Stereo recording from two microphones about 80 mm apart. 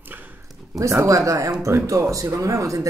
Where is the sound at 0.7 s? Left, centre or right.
Right.